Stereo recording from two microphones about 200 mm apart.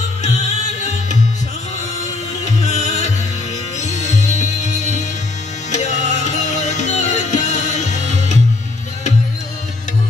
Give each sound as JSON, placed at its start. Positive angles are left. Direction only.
{"t": 0.2, "sound": "music", "side_deg": 35}
{"t": 2.4, "sound": "music", "side_deg": 35}